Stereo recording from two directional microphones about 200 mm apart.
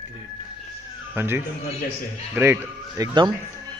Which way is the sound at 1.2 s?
10° right (ahead or behind).